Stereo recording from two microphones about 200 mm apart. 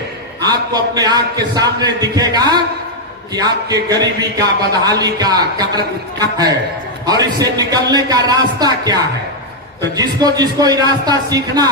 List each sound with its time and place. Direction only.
0.4 s a man's voice: 20° right (ahead or behind)